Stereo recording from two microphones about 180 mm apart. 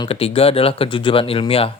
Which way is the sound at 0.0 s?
35° left (ahead or behind).